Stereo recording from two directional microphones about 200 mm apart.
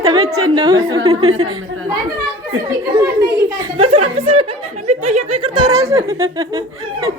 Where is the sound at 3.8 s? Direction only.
30° right (ahead or behind).